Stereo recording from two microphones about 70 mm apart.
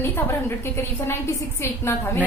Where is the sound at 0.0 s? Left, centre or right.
Left.